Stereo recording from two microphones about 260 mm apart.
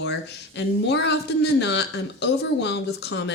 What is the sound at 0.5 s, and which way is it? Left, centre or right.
Speech, left.